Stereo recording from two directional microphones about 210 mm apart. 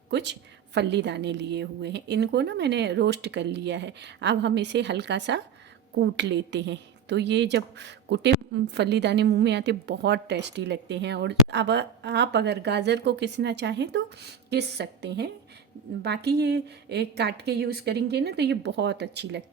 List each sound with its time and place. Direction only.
0.1 s a woman's voice: 55° right (ahead or behind)